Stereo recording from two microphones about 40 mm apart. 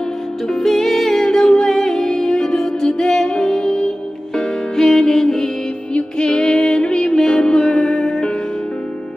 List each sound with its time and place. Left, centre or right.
0.5 s music: centre
6.1 s music: left